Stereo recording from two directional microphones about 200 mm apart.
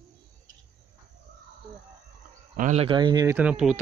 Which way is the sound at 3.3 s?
5° right (ahead or behind).